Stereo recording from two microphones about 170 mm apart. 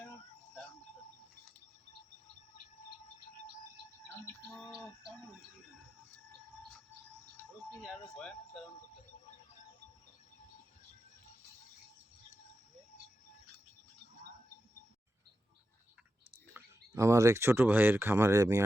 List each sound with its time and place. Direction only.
16.6 s speech: 15° right (ahead or behind)